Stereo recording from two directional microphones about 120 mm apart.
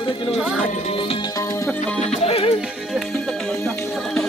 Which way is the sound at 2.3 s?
55° left (ahead or behind).